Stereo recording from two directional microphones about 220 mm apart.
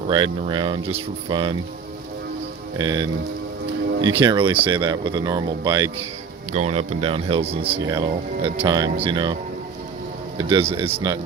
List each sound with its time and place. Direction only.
0.1 s speech: 20° right (ahead or behind)
2.7 s speech: 20° right (ahead or behind)
6.5 s speech: 30° right (ahead or behind)
10.3 s speech: 25° right (ahead or behind)